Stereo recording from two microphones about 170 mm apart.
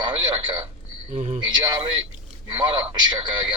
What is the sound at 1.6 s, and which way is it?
Speech, 30° right (ahead or behind).